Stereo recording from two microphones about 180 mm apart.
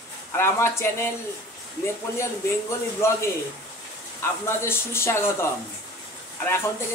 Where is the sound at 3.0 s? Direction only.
15° left (ahead or behind).